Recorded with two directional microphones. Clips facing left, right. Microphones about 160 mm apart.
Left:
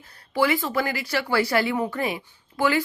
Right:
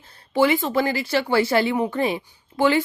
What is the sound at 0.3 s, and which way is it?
Speech, 20° right (ahead or behind).